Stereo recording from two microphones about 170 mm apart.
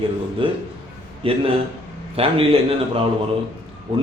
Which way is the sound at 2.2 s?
35° right (ahead or behind).